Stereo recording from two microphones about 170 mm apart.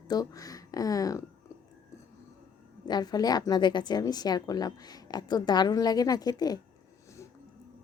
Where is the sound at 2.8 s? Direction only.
25° left (ahead or behind).